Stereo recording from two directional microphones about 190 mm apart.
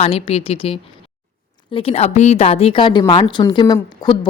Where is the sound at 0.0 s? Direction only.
35° left (ahead or behind).